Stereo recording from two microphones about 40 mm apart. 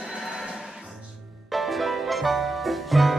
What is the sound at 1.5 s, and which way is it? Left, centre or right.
Music, centre.